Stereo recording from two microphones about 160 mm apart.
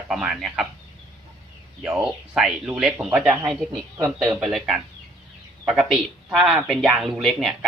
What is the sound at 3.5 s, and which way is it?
Speech, 5° left (ahead or behind).